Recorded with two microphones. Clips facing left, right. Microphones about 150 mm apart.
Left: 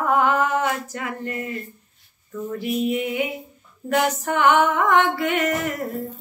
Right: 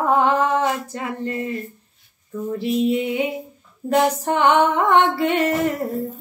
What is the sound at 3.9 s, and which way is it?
Music, 30° right (ahead or behind).